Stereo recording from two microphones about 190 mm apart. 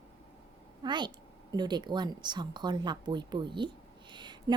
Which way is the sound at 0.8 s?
25° right (ahead or behind).